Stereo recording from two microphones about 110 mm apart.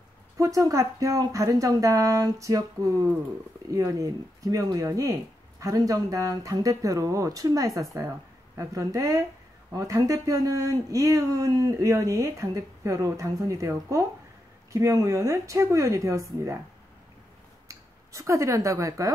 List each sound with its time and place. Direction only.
0.4 s a woman's voice: 30° right (ahead or behind)
17.6 s speech: 30° right (ahead or behind)